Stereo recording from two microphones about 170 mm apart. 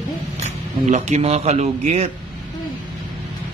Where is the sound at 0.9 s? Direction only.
40° right (ahead or behind).